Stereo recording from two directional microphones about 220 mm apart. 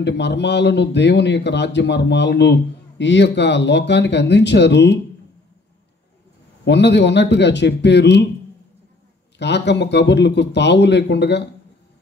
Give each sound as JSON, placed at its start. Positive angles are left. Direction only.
{"t": 0.0, "sound": "a man's voice", "side_deg": 50}
{"t": 6.6, "sound": "a man's voice", "side_deg": 50}
{"t": 9.4, "sound": "a man's voice", "side_deg": 50}